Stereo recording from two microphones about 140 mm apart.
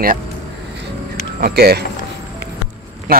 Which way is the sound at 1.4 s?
90° right.